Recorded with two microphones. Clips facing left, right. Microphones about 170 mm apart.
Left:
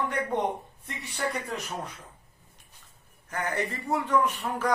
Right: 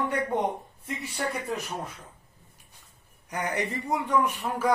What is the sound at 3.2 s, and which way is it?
Speech, 15° right (ahead or behind).